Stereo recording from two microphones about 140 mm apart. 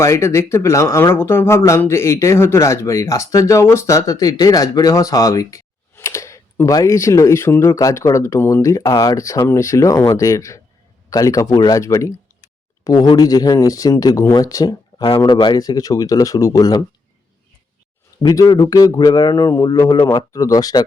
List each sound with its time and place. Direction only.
0.0 s speech: 20° left (ahead or behind)
18.2 s speech: 30° left (ahead or behind)